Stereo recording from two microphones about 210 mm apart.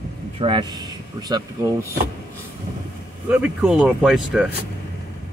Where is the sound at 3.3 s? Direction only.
5° right (ahead or behind).